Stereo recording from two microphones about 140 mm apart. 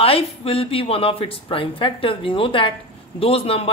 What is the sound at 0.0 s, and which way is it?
Speech, 40° left (ahead or behind).